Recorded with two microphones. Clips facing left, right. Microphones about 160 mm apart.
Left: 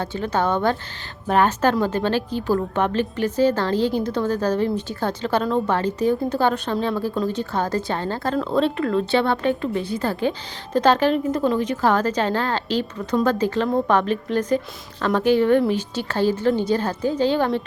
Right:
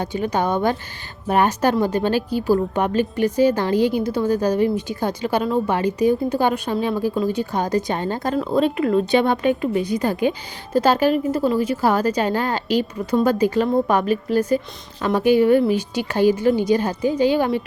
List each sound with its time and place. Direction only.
0.0 s a woman's voice: 15° right (ahead or behind)